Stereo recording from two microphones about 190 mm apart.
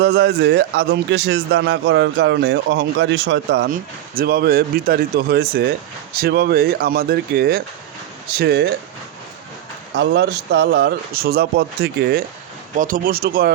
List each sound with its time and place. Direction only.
0.0 s a man's voice: 60° right (ahead or behind)
3.7 s a man's voice: 50° right (ahead or behind)
9.9 s a man's voice: 65° right (ahead or behind)
12.7 s speech: 45° right (ahead or behind)